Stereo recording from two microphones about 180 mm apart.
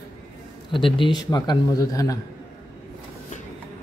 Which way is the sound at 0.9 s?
25° left (ahead or behind).